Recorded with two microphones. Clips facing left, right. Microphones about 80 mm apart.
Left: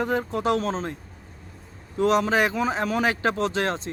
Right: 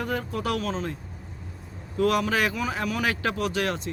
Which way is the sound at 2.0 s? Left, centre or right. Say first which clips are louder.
Left 3 dB; left.